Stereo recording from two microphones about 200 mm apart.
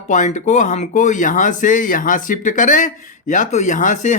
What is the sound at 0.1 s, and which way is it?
Speech, 35° left (ahead or behind).